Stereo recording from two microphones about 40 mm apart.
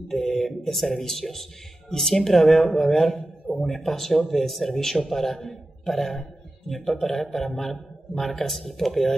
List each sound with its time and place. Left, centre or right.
0.1 s music: centre
0.7 s speech: centre
3.5 s speech: centre